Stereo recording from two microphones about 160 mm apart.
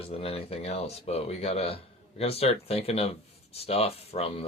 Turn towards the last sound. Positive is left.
turn(degrees=35)  # may be behind; listen again after turning